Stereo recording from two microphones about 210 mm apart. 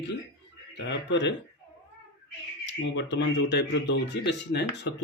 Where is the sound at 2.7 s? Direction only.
60° left (ahead or behind).